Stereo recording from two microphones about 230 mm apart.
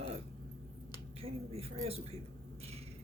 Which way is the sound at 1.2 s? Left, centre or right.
Right.